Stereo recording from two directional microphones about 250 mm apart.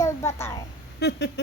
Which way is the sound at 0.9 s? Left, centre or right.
Left.